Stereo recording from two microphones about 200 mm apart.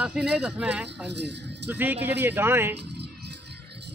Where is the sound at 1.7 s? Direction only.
10° right (ahead or behind).